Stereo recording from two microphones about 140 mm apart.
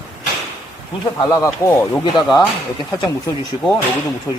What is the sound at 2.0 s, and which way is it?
Speech, 30° left (ahead or behind).